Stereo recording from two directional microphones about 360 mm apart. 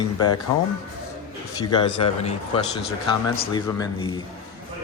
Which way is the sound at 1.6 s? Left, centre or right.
Centre.